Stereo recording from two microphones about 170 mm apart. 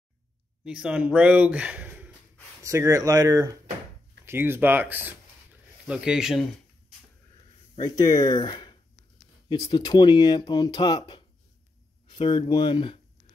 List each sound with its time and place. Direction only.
0.7 s speech: 5° right (ahead or behind)
7.8 s speech: 20° left (ahead or behind)